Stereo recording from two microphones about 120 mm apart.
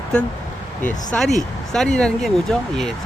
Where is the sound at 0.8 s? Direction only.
90° left.